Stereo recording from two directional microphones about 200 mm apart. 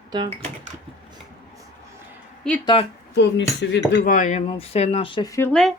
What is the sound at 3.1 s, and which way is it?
Speech, 60° left (ahead or behind).